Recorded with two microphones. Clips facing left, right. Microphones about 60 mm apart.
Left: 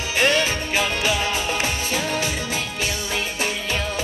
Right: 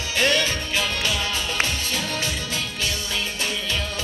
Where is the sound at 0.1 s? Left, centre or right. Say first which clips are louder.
Left 2 dB; left.